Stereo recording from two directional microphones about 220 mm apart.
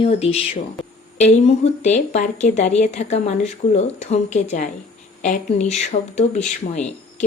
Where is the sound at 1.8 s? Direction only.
30° left (ahead or behind).